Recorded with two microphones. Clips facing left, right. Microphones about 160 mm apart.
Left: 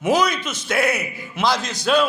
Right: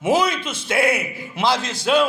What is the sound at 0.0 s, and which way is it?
A man's voice, 25° right (ahead or behind).